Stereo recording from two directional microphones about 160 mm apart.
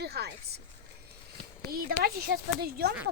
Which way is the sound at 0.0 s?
85° right.